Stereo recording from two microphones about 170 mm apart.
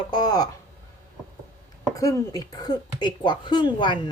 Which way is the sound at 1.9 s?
20° left (ahead or behind).